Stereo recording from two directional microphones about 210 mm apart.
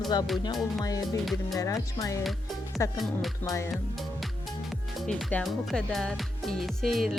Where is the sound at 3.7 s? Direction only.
Centre (ahead or behind).